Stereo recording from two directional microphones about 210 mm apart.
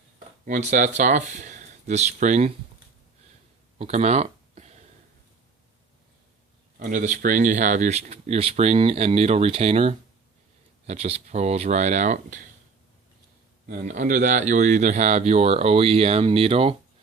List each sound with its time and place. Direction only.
0.4 s speech: 35° right (ahead or behind)
3.8 s a sound: 30° right (ahead or behind)
6.7 s speech: 40° right (ahead or behind)
13.7 s speech: 35° right (ahead or behind)